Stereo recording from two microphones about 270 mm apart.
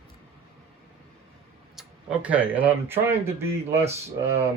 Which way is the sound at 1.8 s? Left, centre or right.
Centre.